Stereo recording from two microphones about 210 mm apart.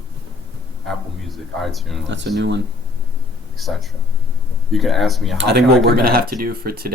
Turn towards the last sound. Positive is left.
turn(degrees=-45)  # may be behind; listen again after turning